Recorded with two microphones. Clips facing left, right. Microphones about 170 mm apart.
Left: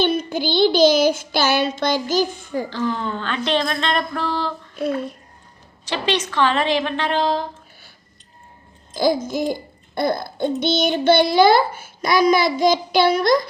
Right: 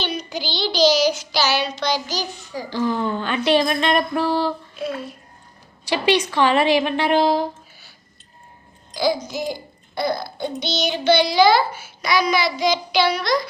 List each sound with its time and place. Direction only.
0.0 s a child's voice: 50° left (ahead or behind)
2.6 s speech: 10° right (ahead or behind)
5.8 s speech: 10° right (ahead or behind)
9.0 s a child's voice: 50° left (ahead or behind)